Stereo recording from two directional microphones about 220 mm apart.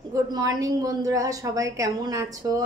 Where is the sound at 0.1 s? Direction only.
15° right (ahead or behind).